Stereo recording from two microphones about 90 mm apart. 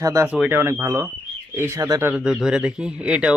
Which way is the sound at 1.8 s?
40° right (ahead or behind).